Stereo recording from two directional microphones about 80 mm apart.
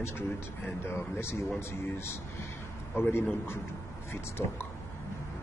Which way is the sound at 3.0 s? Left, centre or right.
Left.